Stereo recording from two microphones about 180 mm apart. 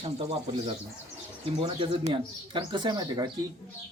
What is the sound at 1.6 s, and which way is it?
Speech, 30° right (ahead or behind).